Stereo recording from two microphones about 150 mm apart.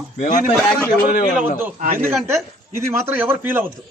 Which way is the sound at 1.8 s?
60° right (ahead or behind).